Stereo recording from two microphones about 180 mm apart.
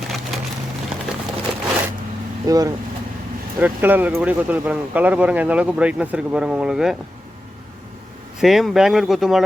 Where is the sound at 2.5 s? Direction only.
20° right (ahead or behind); by 6.9 s 5° right (ahead or behind).